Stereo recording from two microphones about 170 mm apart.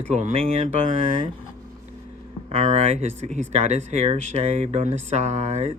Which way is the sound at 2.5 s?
40° right (ahead or behind).